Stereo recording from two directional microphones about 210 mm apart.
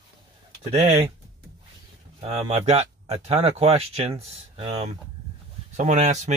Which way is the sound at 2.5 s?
30° right (ahead or behind).